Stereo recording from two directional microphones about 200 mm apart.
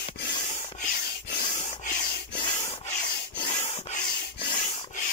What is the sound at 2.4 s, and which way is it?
Rub, 20° left (ahead or behind).